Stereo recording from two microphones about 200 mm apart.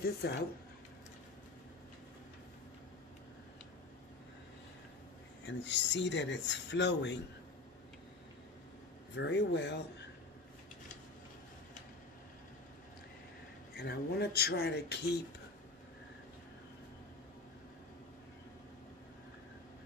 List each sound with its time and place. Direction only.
0.0 s speech: 55° left (ahead or behind)
5.4 s speech: 65° left (ahead or behind)
9.1 s speech: 60° left (ahead or behind)
13.7 s speech: 55° left (ahead or behind)